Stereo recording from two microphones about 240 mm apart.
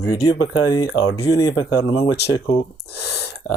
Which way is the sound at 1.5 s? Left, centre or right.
Left.